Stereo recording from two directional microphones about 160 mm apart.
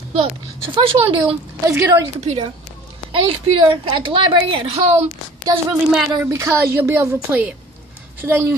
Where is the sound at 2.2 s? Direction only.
40° right (ahead or behind).